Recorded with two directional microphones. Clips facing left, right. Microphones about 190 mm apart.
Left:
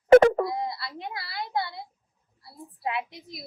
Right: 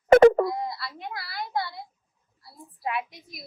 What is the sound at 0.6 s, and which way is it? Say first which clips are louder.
A woman's voice: left 1 dB; 25° left (ahead or behind).